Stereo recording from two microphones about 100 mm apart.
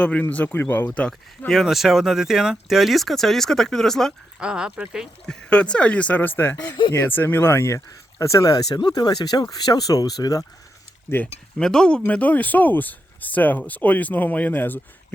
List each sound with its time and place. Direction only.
0.0 s speech: 15° left (ahead or behind)
4.4 s speech: 10° right (ahead or behind)
5.2 s speech: 10° left (ahead or behind)
6.6 s speech: 55° left (ahead or behind)
6.9 s speech: 20° left (ahead or behind); by 10.4 s 40° left (ahead or behind)
11.5 s speech: 5° left (ahead or behind)